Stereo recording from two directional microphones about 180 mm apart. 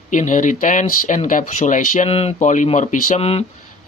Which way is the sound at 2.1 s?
35° left (ahead or behind).